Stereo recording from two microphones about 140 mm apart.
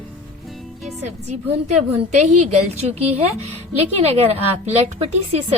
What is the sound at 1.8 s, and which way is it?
A woman's voice, 55° right (ahead or behind).